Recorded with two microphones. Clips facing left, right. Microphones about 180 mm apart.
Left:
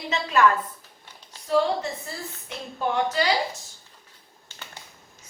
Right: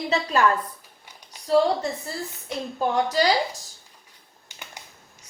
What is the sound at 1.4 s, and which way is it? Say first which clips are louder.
Speech: right 3 dB; 35° right (ahead or behind).